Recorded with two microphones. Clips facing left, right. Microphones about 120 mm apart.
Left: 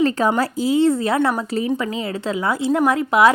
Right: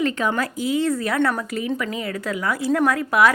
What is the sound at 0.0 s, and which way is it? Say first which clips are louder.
Speech: left 4 dB; 35° left (ahead or behind).